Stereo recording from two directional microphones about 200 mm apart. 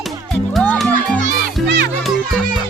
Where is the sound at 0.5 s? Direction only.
5° left (ahead or behind).